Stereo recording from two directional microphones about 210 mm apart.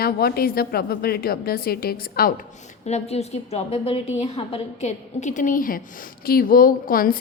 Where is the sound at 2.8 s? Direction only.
30° left (ahead or behind).